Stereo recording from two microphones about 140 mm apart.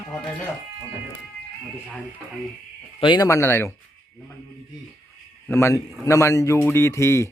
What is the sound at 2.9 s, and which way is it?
Speech, 30° left (ahead or behind).